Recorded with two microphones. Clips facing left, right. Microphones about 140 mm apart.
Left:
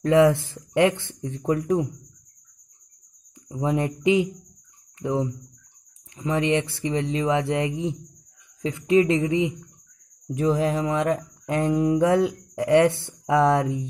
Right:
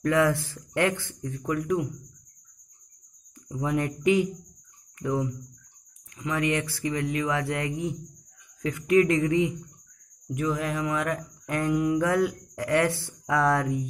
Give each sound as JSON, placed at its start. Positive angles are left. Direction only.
{"t": 0.0, "sound": "speech", "side_deg": 25}
{"t": 3.4, "sound": "speech", "side_deg": 25}